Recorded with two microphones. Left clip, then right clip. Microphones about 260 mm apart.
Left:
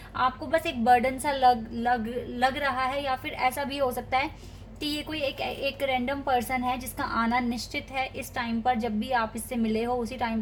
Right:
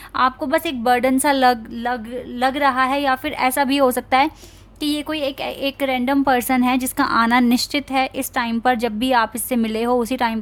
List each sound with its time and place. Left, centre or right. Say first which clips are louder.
0.2 s a woman's voice: right 8 dB; right
2.4 s a woman's voice: right 9 dB; right